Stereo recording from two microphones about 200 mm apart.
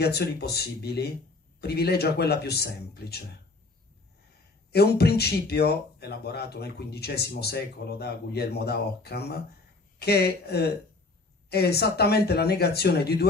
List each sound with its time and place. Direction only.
0.0 s speech: 55° left (ahead or behind)
4.7 s speech: 55° left (ahead or behind)